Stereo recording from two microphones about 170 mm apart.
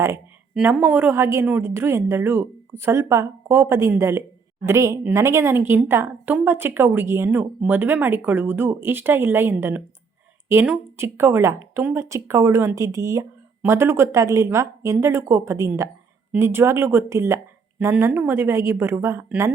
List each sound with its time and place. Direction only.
0.5 s speech: 10° right (ahead or behind)